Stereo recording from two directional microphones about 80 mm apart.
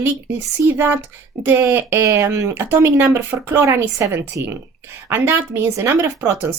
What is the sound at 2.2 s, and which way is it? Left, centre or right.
Speech, right.